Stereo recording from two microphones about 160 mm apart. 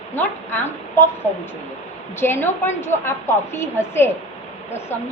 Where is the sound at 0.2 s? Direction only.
10° left (ahead or behind).